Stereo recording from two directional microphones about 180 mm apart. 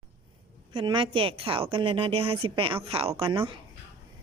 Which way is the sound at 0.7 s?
25° right (ahead or behind).